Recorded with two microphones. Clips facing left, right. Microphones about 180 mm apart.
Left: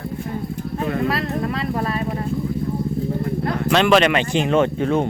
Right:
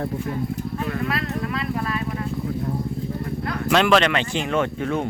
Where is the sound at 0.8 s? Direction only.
35° left (ahead or behind).